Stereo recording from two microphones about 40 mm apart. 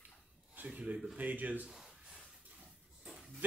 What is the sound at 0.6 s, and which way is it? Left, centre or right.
Speech, right.